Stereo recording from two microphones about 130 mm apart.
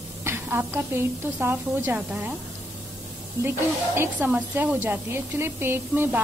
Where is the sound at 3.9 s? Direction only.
15° right (ahead or behind).